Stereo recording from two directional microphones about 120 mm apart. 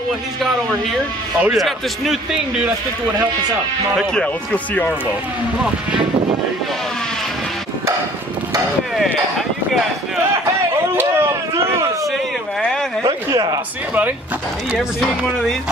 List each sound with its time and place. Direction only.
1.4 s speech: 5° right (ahead or behind)
11.0 s a sound: 20° right (ahead or behind)
14.8 s speech: centre (ahead or behind)